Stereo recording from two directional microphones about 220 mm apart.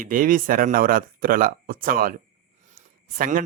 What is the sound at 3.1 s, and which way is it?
Speech, 40° right (ahead or behind).